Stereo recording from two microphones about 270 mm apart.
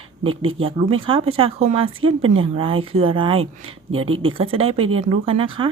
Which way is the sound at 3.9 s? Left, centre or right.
Right.